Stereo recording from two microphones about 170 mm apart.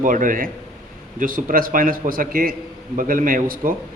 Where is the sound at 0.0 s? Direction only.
50° right (ahead or behind).